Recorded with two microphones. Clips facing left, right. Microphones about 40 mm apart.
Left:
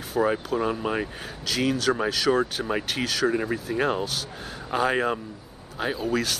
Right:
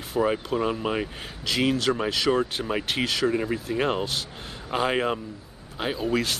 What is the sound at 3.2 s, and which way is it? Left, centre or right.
Speech, centre.